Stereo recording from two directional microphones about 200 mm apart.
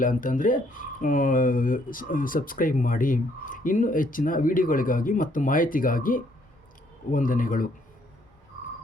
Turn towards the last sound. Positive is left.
turn(degrees=40)  # may be behind; listen again after turning